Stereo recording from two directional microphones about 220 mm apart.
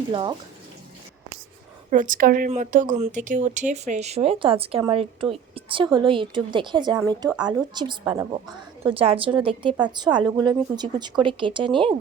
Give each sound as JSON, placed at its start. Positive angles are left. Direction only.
{"t": 0.1, "sound": "speech", "side_deg": -20}
{"t": 1.9, "sound": "speech", "side_deg": -35}
{"t": 8.9, "sound": "speech", "side_deg": -25}